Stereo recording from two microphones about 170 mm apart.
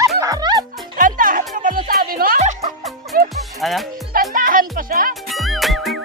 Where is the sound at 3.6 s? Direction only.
Centre (ahead or behind).